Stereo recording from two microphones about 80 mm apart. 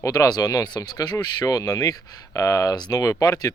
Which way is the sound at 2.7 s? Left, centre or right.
Left.